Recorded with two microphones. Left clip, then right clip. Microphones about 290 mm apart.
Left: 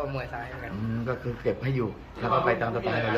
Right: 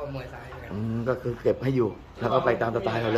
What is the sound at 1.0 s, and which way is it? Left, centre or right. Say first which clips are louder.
A man's voice: right 5 dB; right.